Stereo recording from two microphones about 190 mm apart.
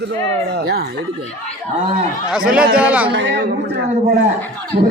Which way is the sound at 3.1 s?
70° right (ahead or behind).